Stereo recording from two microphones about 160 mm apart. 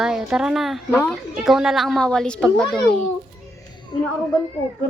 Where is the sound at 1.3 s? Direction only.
Centre (ahead or behind).